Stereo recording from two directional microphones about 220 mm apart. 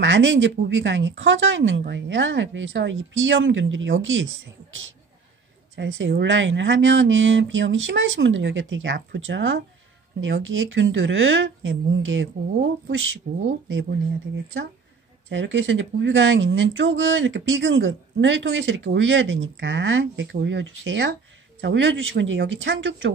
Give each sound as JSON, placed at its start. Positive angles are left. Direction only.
{"t": 0.0, "sound": "speech", "side_deg": -55}
{"t": 5.8, "sound": "a woman's voice", "side_deg": -60}